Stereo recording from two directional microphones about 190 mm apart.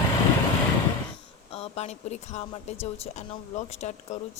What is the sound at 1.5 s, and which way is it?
Speech, 30° left (ahead or behind).